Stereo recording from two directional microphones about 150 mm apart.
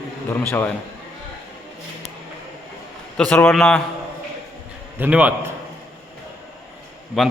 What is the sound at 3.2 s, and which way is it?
Speech, 10° left (ahead or behind).